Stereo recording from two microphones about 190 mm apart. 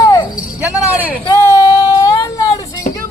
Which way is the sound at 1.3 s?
20° left (ahead or behind).